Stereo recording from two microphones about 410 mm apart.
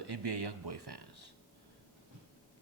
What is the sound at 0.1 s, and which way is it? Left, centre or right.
Speech, right.